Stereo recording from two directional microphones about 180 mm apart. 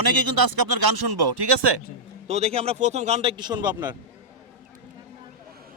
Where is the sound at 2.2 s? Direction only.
35° right (ahead or behind).